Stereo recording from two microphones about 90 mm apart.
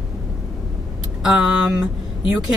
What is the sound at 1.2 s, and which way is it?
Speech, 5° right (ahead or behind).